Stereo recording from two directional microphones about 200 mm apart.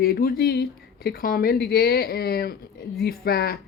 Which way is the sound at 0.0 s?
50° left (ahead or behind).